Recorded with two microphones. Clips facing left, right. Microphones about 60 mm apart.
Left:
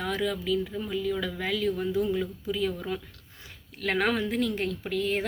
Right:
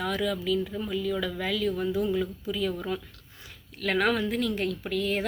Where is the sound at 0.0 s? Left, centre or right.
Left.